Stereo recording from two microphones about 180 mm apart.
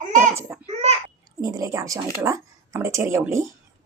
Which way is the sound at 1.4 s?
20° right (ahead or behind).